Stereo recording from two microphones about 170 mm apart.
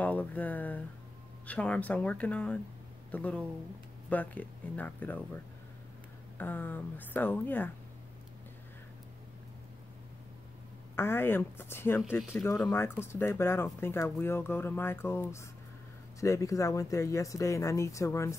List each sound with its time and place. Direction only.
0.0 s speech: 10° left (ahead or behind)
11.0 s speech: 15° left (ahead or behind)